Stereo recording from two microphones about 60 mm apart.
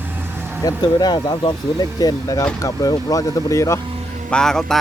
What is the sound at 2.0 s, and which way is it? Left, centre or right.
Speech, left.